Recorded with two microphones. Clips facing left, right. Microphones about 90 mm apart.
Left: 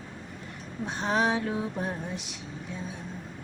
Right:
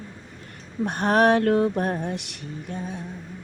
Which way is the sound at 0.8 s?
60° right (ahead or behind).